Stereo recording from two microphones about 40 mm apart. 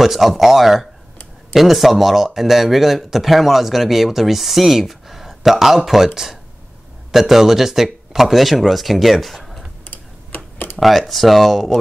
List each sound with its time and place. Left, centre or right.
0.0 s speech: centre
7.1 s speech: centre
9.8 s typing: left
10.8 s speech: centre